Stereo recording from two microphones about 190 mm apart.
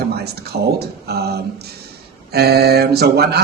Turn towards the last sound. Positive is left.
turn(degrees=-55)  # may be behind; listen again after turning